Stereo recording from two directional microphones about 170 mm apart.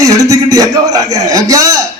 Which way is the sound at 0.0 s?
20° right (ahead or behind).